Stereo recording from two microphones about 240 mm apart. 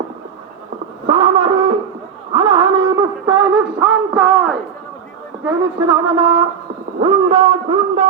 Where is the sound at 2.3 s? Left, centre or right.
Right.